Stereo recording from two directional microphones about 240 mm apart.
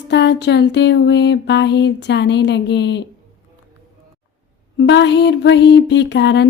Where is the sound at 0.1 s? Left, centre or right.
Left.